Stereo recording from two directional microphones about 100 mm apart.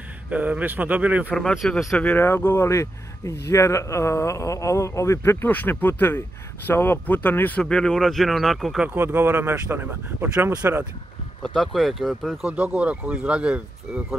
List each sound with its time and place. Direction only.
0.3 s speech: 15° right (ahead or behind)
1.3 s speech: centre (ahead or behind)
2.0 s speech: 20° left (ahead or behind)
7.6 s speech: 5° left (ahead or behind)
8.8 s speech: 20° right (ahead or behind)
11.4 s speech: 5° left (ahead or behind)